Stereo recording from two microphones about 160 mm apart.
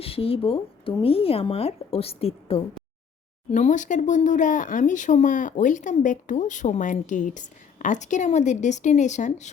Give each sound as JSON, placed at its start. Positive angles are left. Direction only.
{"t": 0.0, "sound": "speech", "side_deg": 35}
{"t": 3.5, "sound": "speech", "side_deg": 50}